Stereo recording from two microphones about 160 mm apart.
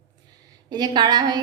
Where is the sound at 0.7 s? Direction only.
25° right (ahead or behind).